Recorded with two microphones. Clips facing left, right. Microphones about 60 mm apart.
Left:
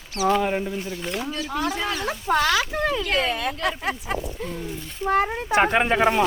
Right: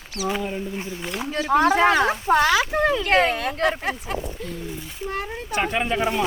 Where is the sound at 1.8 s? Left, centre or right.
Right.